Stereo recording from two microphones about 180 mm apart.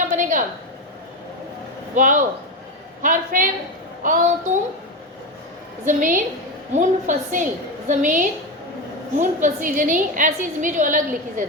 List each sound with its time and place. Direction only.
0.1 s a sound: 45° right (ahead or behind)
2.0 s a woman's voice: 45° right (ahead or behind)
5.8 s a woman's voice: 45° right (ahead or behind)